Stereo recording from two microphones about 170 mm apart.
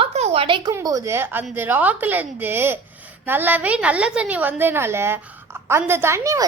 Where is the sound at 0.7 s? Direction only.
20° right (ahead or behind).